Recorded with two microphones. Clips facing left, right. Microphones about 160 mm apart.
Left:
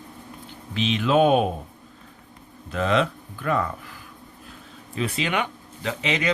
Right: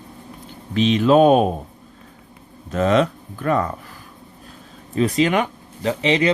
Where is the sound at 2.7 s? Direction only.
45° right (ahead or behind).